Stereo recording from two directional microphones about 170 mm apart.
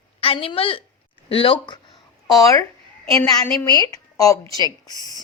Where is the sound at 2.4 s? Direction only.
20° left (ahead or behind).